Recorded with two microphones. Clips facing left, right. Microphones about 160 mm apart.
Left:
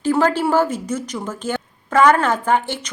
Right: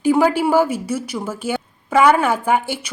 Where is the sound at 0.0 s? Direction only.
10° right (ahead or behind).